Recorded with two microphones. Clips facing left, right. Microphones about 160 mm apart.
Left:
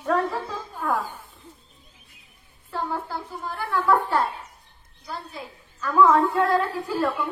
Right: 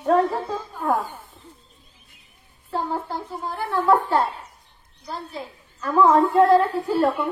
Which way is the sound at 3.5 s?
35° right (ahead or behind).